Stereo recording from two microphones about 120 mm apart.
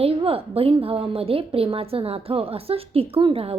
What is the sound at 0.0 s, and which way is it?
A woman's voice, 50° right (ahead or behind).